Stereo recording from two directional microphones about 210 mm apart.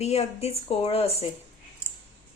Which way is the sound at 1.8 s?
5° right (ahead or behind).